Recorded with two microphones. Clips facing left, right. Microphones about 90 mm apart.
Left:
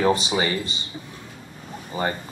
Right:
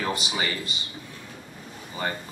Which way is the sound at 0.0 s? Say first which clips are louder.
Left 7 dB; 30° left (ahead or behind).